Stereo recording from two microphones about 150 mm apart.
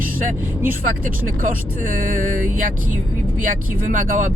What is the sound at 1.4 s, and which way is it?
Speech, 65° right (ahead or behind).